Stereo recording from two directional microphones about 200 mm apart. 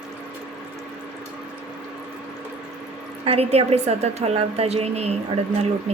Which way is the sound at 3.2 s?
30° right (ahead or behind).